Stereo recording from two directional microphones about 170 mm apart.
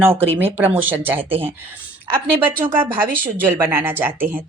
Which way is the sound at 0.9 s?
10° right (ahead or behind).